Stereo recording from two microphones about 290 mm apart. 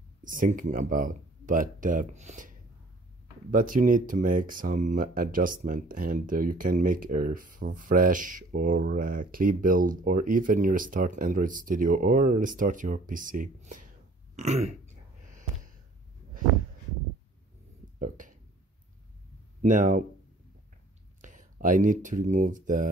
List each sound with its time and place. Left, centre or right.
0.2 s speech: right
3.5 s speech: right
14.3 s throat clearing: right
17.9 s a sound: right
19.6 s speech: right
21.2 s speech: right